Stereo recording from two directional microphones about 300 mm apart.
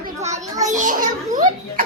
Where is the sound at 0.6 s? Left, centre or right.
Right.